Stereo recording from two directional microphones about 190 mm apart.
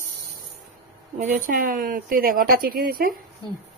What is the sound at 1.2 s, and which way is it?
Speech, 45° right (ahead or behind).